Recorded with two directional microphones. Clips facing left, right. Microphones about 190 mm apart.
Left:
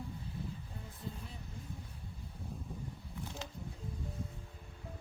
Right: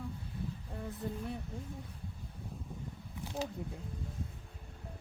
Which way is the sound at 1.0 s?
60° right (ahead or behind).